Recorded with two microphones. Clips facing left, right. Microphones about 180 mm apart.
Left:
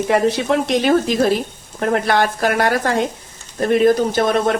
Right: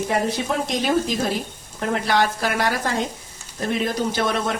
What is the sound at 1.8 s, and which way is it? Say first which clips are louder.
Speech: left 4 dB; 55° left (ahead or behind).